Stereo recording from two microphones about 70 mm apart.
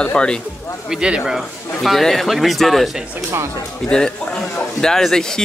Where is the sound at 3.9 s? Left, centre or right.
Centre.